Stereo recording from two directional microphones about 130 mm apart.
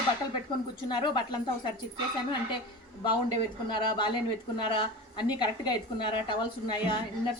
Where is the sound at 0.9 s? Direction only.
35° left (ahead or behind).